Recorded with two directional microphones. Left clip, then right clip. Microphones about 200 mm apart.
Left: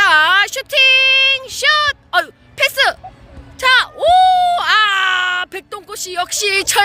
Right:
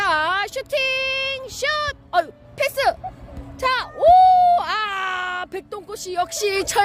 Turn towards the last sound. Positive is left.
turn(degrees=-5)  # may be behind; listen again after turning